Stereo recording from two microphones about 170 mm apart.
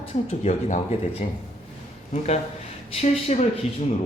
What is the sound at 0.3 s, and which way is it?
Speech, 40° left (ahead or behind).